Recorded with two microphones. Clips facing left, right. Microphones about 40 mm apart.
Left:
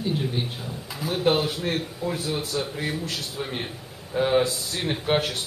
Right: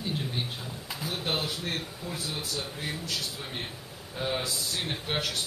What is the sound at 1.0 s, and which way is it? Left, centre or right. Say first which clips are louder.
A man's voice: left 9 dB; left.